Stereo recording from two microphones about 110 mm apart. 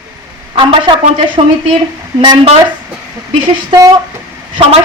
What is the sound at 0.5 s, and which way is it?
Speech, 50° right (ahead or behind).